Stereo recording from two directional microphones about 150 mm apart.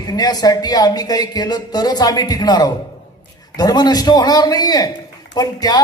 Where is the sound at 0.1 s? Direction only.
25° left (ahead or behind).